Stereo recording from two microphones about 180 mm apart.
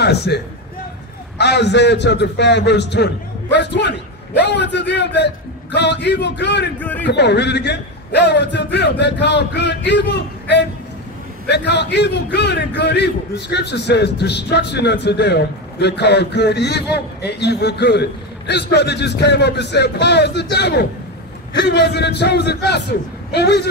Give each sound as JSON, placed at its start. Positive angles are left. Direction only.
{"t": 0.0, "sound": "speech", "side_deg": 65}
{"t": 1.4, "sound": "a man's voice", "side_deg": 70}
{"t": 6.8, "sound": "a man's voice", "side_deg": 10}
{"t": 7.1, "sound": "a man's voice", "side_deg": 70}